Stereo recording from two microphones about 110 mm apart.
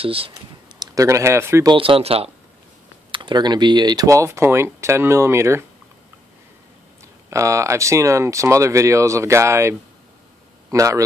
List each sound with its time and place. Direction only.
0.0 s speech: 60° right (ahead or behind)
0.3 s speech: 30° right (ahead or behind)
1.7 s speech: 55° right (ahead or behind)
3.1 s speech: 45° right (ahead or behind); by 5.7 s 25° right (ahead or behind)
7.2 s speech: 25° right (ahead or behind)